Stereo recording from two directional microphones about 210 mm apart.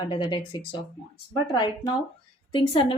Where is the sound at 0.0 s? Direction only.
25° left (ahead or behind).